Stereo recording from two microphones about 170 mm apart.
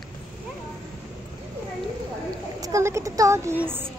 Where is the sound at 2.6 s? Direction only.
20° right (ahead or behind).